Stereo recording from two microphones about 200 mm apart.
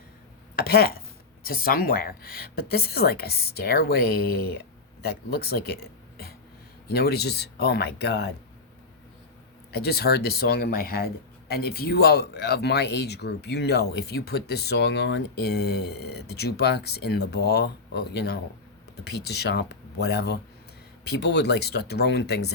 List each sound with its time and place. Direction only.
0.5 s speech: 50° left (ahead or behind)
9.7 s speech: 50° left (ahead or behind)